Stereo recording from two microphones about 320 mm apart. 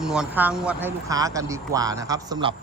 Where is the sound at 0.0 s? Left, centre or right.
Centre.